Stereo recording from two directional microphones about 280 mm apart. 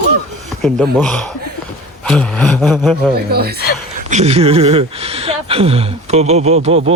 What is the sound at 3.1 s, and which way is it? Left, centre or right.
Speech, right.